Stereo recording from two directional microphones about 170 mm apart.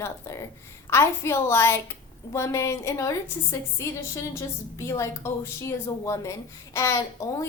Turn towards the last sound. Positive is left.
turn(degrees=20)  # may be behind; listen again after turning